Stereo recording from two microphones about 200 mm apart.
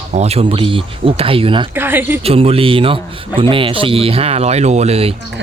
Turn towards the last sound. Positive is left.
turn(degrees=-30)  # may be behind; listen again after turning